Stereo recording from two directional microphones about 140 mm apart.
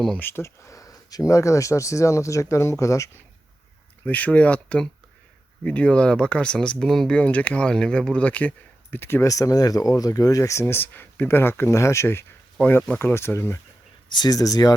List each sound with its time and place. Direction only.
0.2 s speech: 15° left (ahead or behind)
4.0 s speech: 10° left (ahead or behind)
14.1 s speech: 30° left (ahead or behind)